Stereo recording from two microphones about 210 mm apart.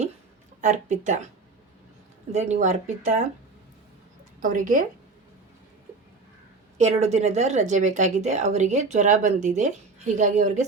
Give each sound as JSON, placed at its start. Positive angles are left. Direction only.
{"t": 0.6, "sound": "speech", "side_deg": -35}
{"t": 2.3, "sound": "speech", "side_deg": -35}
{"t": 4.4, "sound": "speech", "side_deg": -40}
{"t": 6.7, "sound": "speech", "side_deg": -30}